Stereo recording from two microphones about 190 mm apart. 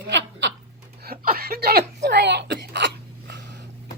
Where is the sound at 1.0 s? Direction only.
50° right (ahead or behind).